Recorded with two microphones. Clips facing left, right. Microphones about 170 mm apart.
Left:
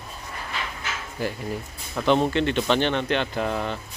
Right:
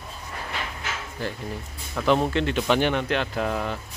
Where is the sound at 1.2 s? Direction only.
10° left (ahead or behind).